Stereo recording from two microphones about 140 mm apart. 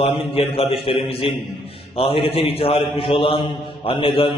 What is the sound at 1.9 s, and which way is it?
Speech, 40° left (ahead or behind).